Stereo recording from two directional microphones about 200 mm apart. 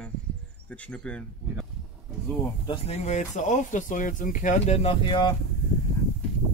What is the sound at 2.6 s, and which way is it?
Speech, 30° left (ahead or behind).